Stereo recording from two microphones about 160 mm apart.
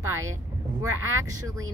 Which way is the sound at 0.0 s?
15° right (ahead or behind).